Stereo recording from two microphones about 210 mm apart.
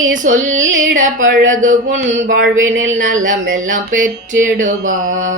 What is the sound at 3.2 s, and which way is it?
Speech, 40° right (ahead or behind).